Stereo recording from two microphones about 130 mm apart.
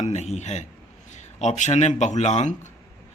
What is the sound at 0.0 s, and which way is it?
Speech, 60° left (ahead or behind).